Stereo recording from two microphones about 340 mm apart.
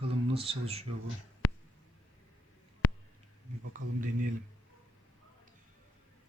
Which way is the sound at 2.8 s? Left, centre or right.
Left.